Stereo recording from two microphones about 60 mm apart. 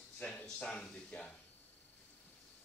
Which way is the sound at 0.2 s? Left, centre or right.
Centre.